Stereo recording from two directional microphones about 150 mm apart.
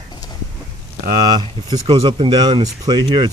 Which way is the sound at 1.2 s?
25° right (ahead or behind).